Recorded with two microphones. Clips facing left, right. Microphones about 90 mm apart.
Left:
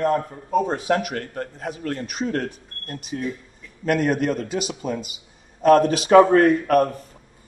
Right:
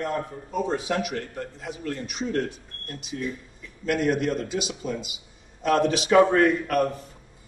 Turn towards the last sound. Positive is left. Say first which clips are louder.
# left 4 dB
turn(degrees=45)  # may be behind; listen again after turning